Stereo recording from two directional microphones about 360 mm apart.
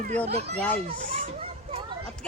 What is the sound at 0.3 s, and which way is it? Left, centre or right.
Speech, right.